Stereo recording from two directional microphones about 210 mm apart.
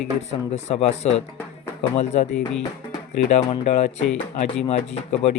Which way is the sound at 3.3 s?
35° left (ahead or behind).